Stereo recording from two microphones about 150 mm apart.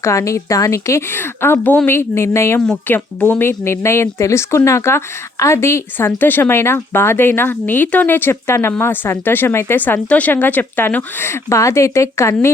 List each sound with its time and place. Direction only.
0.0 s speech: 20° left (ahead or behind)